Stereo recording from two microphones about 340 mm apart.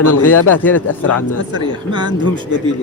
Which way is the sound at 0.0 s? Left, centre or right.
Left.